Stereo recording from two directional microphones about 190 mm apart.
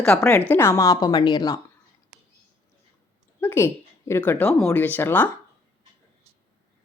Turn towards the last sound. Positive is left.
turn(degrees=10)  # may be behind; listen again after turning